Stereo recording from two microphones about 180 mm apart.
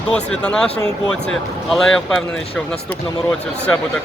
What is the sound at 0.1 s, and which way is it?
Speech, 5° left (ahead or behind).